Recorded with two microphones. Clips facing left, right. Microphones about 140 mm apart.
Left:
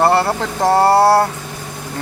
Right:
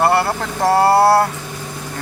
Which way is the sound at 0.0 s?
25° left (ahead or behind).